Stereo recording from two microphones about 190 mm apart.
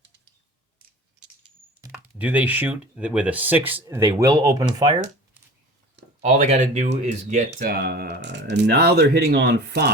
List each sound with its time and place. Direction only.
1.9 s speech: 5° right (ahead or behind)
6.2 s speech: 40° right (ahead or behind)
7.6 s speech: 55° right (ahead or behind)